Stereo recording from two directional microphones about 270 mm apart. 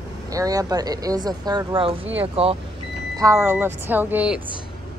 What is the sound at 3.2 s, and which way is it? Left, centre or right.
Speech, centre.